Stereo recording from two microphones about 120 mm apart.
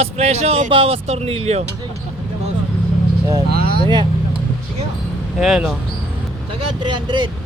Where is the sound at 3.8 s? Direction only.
40° right (ahead or behind).